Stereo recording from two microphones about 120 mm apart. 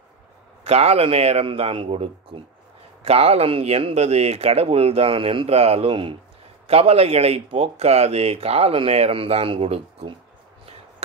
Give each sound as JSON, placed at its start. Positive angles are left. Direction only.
{"t": 0.7, "sound": "speech", "side_deg": -60}
{"t": 6.7, "sound": "speech", "side_deg": -55}